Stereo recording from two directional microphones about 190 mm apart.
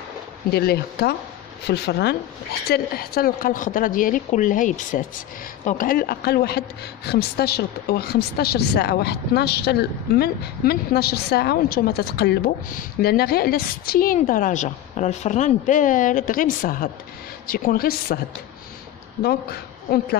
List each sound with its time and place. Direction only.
0.5 s a woman's voice: 55° left (ahead or behind)
19.2 s a woman's voice: 55° left (ahead or behind)